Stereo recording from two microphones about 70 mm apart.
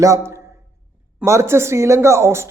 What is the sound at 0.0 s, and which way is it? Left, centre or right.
Speech, right.